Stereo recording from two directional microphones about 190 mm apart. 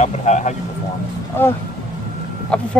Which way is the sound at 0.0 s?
35° left (ahead or behind).